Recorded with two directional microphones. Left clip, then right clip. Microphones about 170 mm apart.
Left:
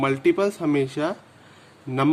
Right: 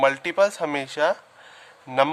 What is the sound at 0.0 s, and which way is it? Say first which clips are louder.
Speech: right 2 dB; 30° right (ahead or behind).